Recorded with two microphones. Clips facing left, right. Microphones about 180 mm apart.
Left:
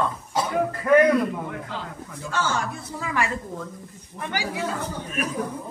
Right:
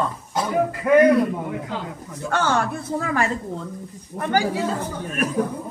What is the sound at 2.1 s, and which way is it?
Speech, 60° right (ahead or behind).